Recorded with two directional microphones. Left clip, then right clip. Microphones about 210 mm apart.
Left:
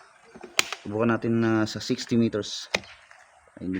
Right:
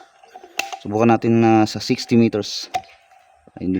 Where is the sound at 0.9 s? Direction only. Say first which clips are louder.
Right 9 dB; 55° right (ahead or behind).